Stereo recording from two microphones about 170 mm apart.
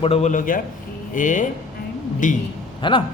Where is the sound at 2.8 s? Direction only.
30° left (ahead or behind).